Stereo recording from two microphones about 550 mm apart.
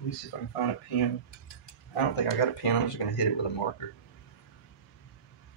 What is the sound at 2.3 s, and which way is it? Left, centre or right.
Speech, left.